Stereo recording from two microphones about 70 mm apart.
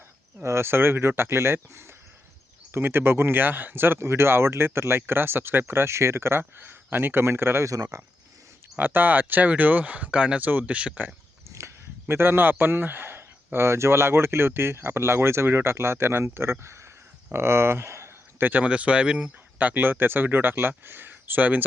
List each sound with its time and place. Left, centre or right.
0.4 s speech: right
2.7 s speech: right
7.9 s speech: right
8.8 s speech: right
11.4 s speech: right
18.6 s speech: centre